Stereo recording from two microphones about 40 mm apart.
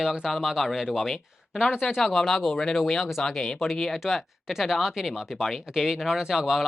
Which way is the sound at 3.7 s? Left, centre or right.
Centre.